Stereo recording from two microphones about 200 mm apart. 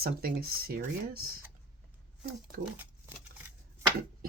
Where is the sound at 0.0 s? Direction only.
50° right (ahead or behind).